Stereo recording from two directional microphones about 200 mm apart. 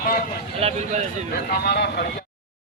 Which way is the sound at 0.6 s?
30° right (ahead or behind).